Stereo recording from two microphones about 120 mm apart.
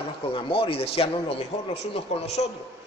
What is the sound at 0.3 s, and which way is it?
A man's voice, 50° left (ahead or behind).